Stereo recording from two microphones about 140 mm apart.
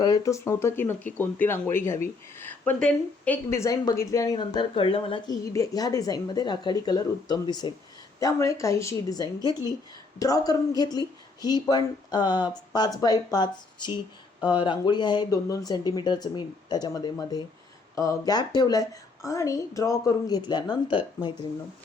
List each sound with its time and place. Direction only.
0.0 s speech: 25° left (ahead or behind)